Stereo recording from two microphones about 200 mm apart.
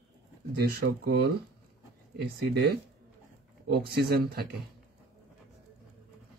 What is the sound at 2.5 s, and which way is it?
Speech, 55° right (ahead or behind).